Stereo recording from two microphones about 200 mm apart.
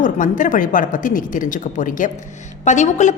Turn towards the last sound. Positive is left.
turn(degrees=35)  # may be behind; listen again after turning